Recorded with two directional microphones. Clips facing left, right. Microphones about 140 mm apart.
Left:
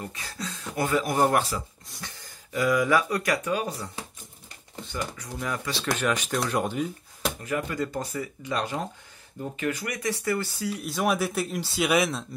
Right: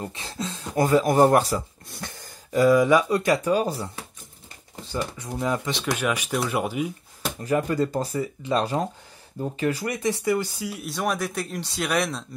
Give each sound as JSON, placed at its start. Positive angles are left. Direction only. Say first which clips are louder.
{"t": 0.0, "sound": "speech", "louder": "right 4 dB", "side_deg": -25}
{"t": 0.7, "sound": "speech", "louder": "right 6 dB", "side_deg": -40}
{"t": 1.9, "sound": "throat clearing", "louder": "right 5 dB", "side_deg": -50}
{"t": 2.7, "sound": "speech", "louder": "right 3 dB", "side_deg": -20}
{"t": 7.4, "sound": "speech", "louder": "right 8 dB", "side_deg": -35}
{"t": 10.2, "sound": "speech", "louder": "right 3 dB", "side_deg": -15}
{"t": 10.8, "sound": "a man's voice", "louder": "left 1 dB", "side_deg": 0}